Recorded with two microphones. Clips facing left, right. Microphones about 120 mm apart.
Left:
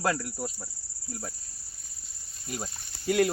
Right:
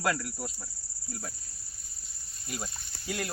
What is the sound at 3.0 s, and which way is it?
Speech, 60° left (ahead or behind).